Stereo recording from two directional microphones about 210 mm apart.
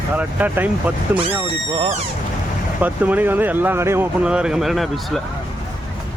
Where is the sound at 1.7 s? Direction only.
25° right (ahead or behind).